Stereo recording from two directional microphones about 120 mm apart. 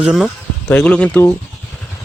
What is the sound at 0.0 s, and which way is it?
Speech, 5° right (ahead or behind).